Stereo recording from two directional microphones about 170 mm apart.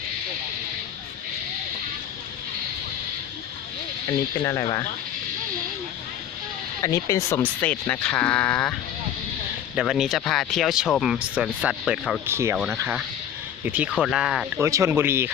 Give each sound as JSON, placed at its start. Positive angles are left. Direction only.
{"t": 4.4, "sound": "speech", "side_deg": 20}
{"t": 6.8, "sound": "speech", "side_deg": 20}
{"t": 9.7, "sound": "speech", "side_deg": -5}
{"t": 12.2, "sound": "speech", "side_deg": -15}
{"t": 14.6, "sound": "speech", "side_deg": -15}